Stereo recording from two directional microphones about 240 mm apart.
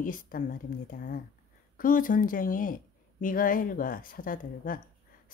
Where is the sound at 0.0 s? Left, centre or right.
Left.